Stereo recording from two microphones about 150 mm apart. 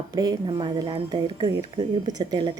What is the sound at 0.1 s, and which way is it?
Speech, 25° right (ahead or behind).